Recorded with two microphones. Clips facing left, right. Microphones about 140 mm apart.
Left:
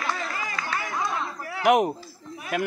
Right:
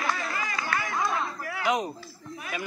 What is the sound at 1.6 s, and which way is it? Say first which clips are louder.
Speech: left 8 dB; 65° left (ahead or behind).